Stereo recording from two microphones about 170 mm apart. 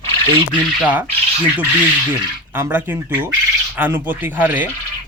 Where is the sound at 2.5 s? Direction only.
10° right (ahead or behind).